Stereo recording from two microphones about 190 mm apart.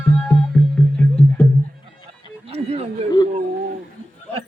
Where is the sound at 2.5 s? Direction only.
30° right (ahead or behind).